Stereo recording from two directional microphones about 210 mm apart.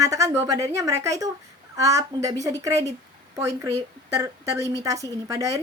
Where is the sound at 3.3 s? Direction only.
15° right (ahead or behind).